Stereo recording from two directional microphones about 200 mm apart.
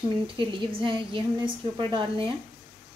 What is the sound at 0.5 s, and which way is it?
A woman's voice, 25° right (ahead or behind).